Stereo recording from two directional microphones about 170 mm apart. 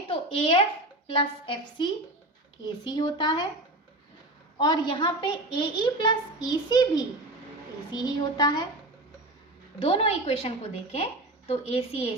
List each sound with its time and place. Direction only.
0.1 s a sound: 35° left (ahead or behind)
1.0 s a woman's voice: 30° left (ahead or behind)
4.5 s a woman's voice: 25° left (ahead or behind)
9.8 s a woman's voice: 35° left (ahead or behind)